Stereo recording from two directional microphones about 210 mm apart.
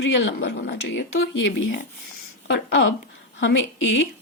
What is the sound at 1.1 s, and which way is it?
Speech, 65° left (ahead or behind).